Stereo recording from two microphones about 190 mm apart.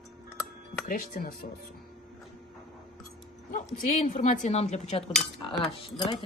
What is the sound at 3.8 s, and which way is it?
A woman's voice, 40° left (ahead or behind).